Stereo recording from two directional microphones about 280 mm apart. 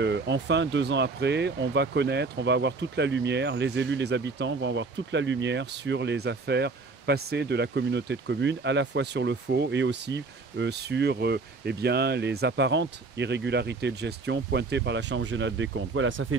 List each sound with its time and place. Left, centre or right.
0.0 s speech: right